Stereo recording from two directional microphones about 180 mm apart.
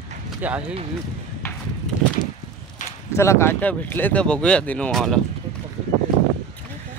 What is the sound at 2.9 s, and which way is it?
Speech, 15° left (ahead or behind).